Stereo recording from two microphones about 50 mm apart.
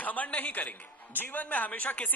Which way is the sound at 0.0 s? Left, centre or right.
Left.